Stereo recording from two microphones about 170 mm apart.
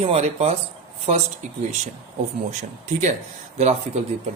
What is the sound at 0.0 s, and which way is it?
Speech, 35° right (ahead or behind).